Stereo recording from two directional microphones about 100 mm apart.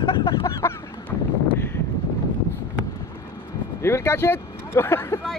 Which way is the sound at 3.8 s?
25° left (ahead or behind).